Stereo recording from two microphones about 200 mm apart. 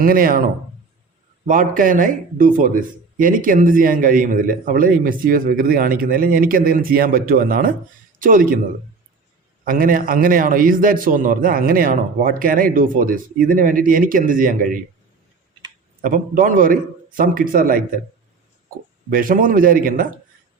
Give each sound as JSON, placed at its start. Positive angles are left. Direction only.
{"t": 0.0, "sound": "a man's voice", "side_deg": -45}
{"t": 1.5, "sound": "a man's voice", "side_deg": -40}
{"t": 9.6, "sound": "a man's voice", "side_deg": -45}
{"t": 16.0, "sound": "a man's voice", "side_deg": -45}
{"t": 19.1, "sound": "a man's voice", "side_deg": -45}